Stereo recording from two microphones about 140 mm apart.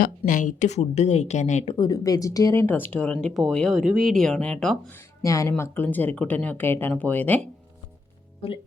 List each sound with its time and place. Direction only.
0.0 s speech: 70° left (ahead or behind)
1.6 s speech: 30° left (ahead or behind); by 4.8 s 5° left (ahead or behind)
4.9 s speech: 25° left (ahead or behind)
8.4 s speech: 45° left (ahead or behind)